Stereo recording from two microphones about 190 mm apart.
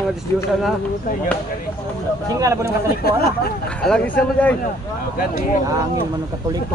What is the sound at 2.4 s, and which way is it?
Speech, 15° right (ahead or behind).